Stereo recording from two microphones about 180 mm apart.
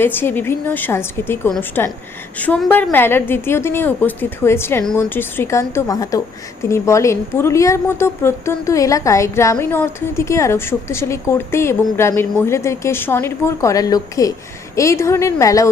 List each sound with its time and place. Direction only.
0.0 s a woman's voice: 10° left (ahead or behind)